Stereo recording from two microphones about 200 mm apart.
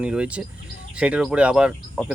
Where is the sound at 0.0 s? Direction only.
5° right (ahead or behind).